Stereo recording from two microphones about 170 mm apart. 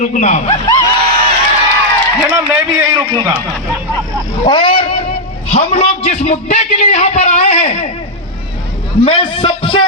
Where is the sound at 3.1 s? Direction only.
25° right (ahead or behind).